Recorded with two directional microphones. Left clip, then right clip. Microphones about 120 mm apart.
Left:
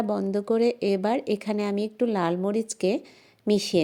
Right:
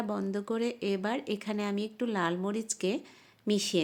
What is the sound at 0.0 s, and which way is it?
Speech, 35° left (ahead or behind).